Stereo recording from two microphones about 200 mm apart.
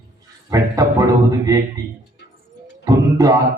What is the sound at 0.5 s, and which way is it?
A man's voice, 15° right (ahead or behind).